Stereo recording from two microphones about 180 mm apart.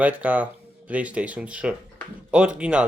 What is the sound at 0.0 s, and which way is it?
Speech, 10° right (ahead or behind).